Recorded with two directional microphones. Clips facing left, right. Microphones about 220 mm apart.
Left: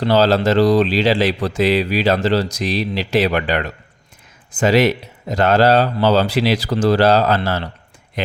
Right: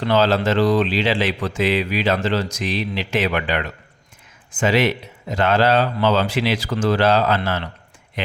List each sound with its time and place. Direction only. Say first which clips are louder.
0.0 s speech: left 3 dB; 35° left (ahead or behind)